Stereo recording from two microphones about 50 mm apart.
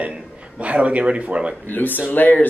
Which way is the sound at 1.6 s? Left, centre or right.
Left.